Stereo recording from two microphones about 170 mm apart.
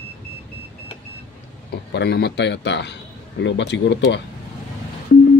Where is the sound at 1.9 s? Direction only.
70° left (ahead or behind); by 4.2 s 90° left.